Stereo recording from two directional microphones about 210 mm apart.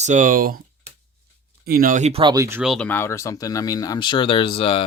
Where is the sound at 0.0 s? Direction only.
35° right (ahead or behind).